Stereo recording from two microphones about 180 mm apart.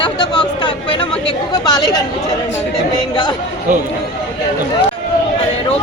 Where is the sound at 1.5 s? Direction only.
25° left (ahead or behind).